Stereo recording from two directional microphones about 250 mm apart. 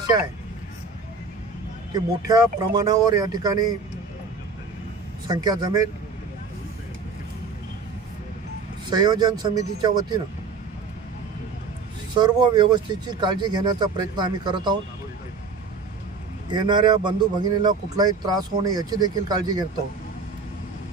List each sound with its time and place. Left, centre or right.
2.0 s speech: centre
5.3 s speech: centre
8.9 s speech: centre
12.2 s speech: centre
16.4 s speech: centre